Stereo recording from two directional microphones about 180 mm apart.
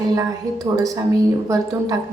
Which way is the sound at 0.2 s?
20° right (ahead or behind).